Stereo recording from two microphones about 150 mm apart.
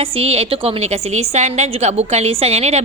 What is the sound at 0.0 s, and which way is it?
Speech, 40° right (ahead or behind).